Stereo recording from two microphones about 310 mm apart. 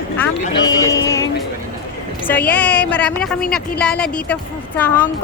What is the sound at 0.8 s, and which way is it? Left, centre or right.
Speech, centre.